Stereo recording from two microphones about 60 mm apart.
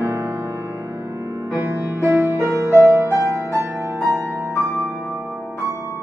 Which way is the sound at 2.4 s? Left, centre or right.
Right.